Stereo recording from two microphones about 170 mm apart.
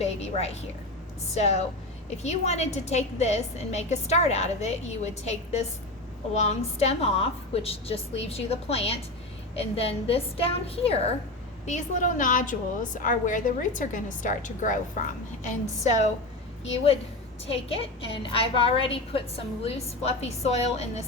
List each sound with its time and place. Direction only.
0.0 s a sound: 40° left (ahead or behind)
1.3 s a woman's voice: 40° left (ahead or behind)
11.6 s a woman's voice: 45° left (ahead or behind)
17.4 s a woman's voice: 35° left (ahead or behind)